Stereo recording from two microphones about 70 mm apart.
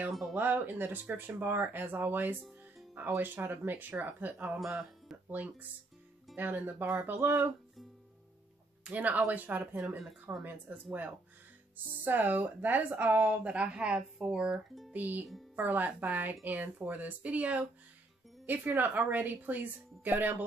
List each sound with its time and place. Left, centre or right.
0.4 s speech: right
8.8 s speech: right
9.8 s speech: centre
10.4 s speech: right
14.9 s speech: right